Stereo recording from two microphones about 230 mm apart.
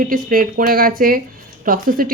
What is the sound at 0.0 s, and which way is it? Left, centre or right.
Speech, right.